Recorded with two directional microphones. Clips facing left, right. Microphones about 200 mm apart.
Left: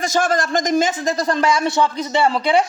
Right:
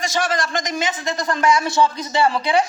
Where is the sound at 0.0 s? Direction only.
50° left (ahead or behind); by 1.6 s 30° left (ahead or behind).